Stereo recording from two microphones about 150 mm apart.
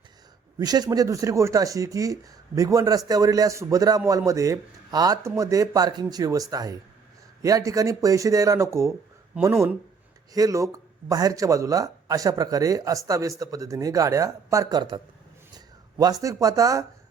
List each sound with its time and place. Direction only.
0.6 s speech: 25° right (ahead or behind)